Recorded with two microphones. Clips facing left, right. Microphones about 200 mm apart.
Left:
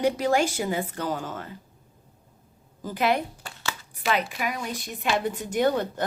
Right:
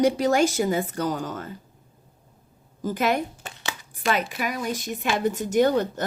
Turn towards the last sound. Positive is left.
turn(degrees=-40)  # may be behind; listen again after turning